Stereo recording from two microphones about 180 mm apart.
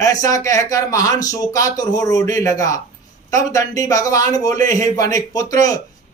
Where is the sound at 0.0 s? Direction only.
20° left (ahead or behind).